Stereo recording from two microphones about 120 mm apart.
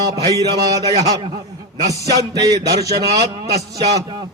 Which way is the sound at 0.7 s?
30° right (ahead or behind).